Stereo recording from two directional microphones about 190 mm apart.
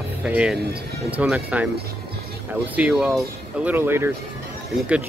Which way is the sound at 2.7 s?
5° right (ahead or behind).